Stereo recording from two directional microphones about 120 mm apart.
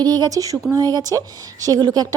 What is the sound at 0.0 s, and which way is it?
A woman's voice, 35° right (ahead or behind).